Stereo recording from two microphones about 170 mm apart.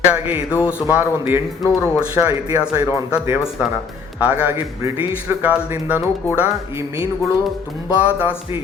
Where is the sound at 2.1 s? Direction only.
15° right (ahead or behind).